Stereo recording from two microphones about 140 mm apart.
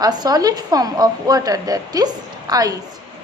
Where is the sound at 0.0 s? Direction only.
30° right (ahead or behind).